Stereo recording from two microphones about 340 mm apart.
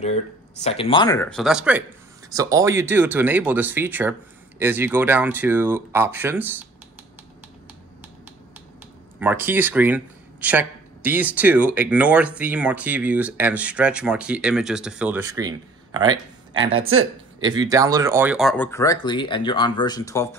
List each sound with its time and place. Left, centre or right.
0.0 s speech: centre
9.2 s speech: centre
16.5 s speech: right
17.4 s speech: centre